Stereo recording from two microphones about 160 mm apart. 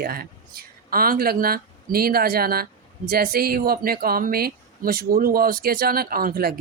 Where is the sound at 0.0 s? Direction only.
70° right (ahead or behind).